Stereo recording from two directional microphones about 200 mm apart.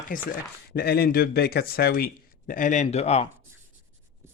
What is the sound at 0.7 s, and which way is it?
Speech, 50° left (ahead or behind).